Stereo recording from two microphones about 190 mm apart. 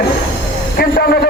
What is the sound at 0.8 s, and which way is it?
Speech, 55° left (ahead or behind).